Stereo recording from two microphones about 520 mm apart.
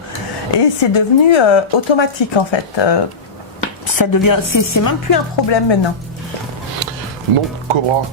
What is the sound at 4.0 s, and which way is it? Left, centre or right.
A woman's voice, left.